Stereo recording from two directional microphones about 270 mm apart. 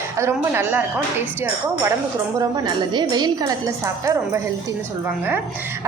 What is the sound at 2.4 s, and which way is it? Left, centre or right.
A woman's voice, centre.